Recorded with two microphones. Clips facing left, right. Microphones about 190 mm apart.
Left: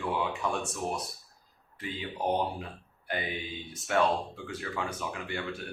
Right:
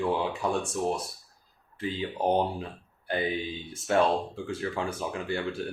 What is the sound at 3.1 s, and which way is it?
Speech, 30° right (ahead or behind).